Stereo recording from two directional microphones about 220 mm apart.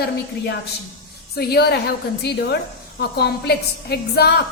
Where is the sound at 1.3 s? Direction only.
45° left (ahead or behind).